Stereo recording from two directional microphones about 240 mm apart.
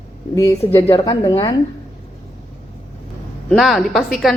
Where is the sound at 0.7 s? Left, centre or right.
Left.